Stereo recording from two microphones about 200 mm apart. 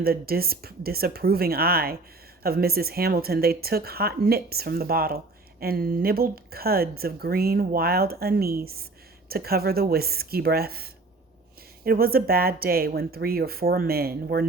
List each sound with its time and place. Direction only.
0.0 s speech: 50° right (ahead or behind)
11.9 s speech: 50° right (ahead or behind)